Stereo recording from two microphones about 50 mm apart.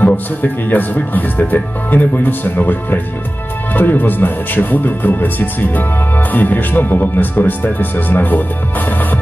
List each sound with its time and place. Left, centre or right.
0.0 s speech: left